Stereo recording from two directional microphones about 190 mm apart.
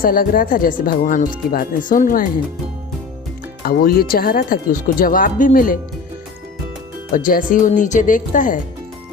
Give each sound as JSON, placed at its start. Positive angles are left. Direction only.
{"t": 0.0, "sound": "speech", "side_deg": 50}
{"t": 3.6, "sound": "speech", "side_deg": 50}
{"t": 7.1, "sound": "speech", "side_deg": 45}